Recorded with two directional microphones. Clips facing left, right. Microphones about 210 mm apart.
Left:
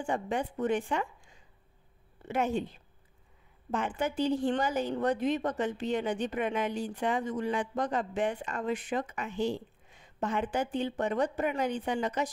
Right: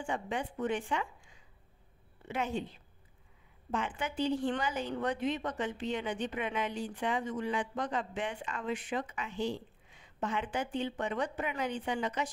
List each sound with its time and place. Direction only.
0.0 s a woman's voice: 40° left (ahead or behind)
3.7 s a woman's voice: 45° left (ahead or behind)